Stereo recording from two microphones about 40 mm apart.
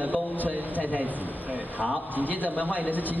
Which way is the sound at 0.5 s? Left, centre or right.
Right.